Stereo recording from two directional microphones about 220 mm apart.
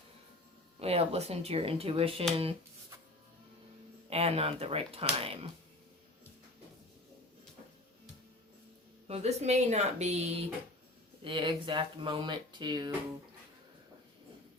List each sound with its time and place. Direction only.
0.8 s speech: 25° right (ahead or behind)
4.1 s speech: 25° right (ahead or behind)
9.0 s speech: 30° right (ahead or behind)